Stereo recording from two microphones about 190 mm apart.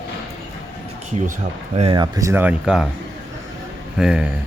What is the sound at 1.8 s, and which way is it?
Speech, 25° right (ahead or behind).